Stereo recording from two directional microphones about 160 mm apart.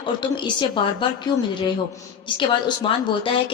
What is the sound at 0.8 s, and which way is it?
Speech, 30° left (ahead or behind).